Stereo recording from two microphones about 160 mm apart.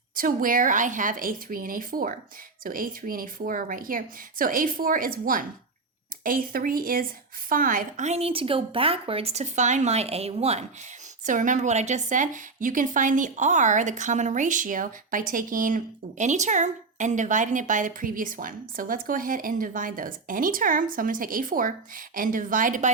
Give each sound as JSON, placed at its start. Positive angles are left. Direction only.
{"t": 0.2, "sound": "a woman's voice", "side_deg": -60}
{"t": 8.0, "sound": "speech", "side_deg": -40}
{"t": 11.3, "sound": "a woman's voice", "side_deg": -55}